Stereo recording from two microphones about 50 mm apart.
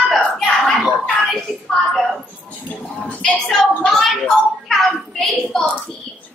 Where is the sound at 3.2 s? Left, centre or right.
Centre.